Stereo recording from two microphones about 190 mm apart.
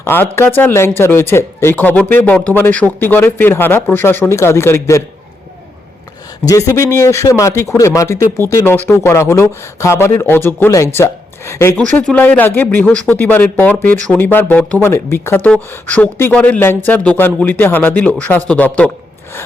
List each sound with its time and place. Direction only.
0.0 s speech: 10° left (ahead or behind)
6.5 s speech: 15° left (ahead or behind)